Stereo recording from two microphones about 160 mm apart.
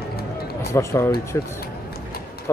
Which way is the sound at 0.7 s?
15° left (ahead or behind).